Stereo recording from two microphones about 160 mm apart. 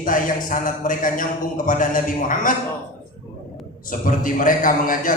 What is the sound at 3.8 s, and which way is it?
A man's voice, 55° left (ahead or behind).